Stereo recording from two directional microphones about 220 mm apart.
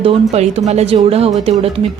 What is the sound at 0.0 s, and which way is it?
A woman's voice, 25° right (ahead or behind).